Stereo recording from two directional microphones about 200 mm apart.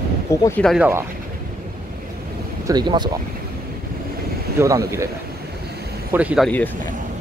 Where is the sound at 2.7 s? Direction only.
20° right (ahead or behind).